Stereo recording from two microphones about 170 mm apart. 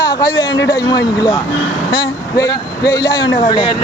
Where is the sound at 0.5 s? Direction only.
90° left.